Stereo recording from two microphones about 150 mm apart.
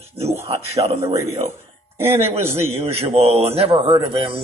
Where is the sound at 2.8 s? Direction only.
40° right (ahead or behind).